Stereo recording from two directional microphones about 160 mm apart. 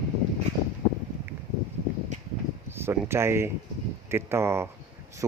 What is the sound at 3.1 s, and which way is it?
Speech, 15° right (ahead or behind).